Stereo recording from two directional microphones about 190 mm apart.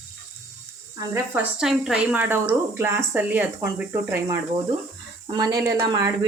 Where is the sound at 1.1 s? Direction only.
5° right (ahead or behind).